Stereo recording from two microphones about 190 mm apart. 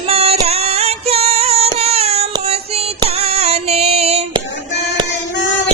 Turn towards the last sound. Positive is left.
turn(degrees=-35)  # may be behind; listen again after turning